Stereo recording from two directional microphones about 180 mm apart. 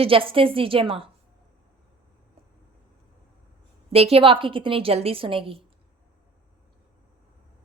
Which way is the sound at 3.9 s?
35° right (ahead or behind).